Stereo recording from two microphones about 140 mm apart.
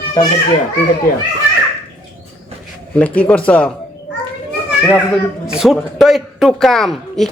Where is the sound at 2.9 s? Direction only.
10° left (ahead or behind).